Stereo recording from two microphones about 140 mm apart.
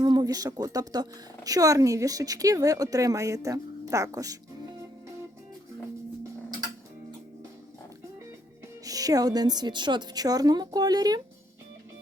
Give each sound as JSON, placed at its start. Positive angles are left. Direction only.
{"t": 0.0, "sound": "speech", "side_deg": -30}
{"t": 8.8, "sound": "speech", "side_deg": -25}